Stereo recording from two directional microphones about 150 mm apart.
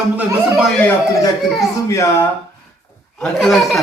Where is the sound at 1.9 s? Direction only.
20° left (ahead or behind).